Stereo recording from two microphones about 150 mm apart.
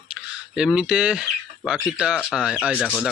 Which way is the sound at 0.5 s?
5° right (ahead or behind).